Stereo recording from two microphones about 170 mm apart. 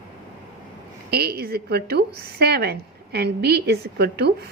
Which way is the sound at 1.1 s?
65° right (ahead or behind).